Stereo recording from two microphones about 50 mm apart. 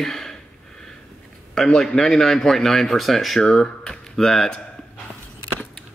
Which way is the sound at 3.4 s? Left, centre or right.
Centre.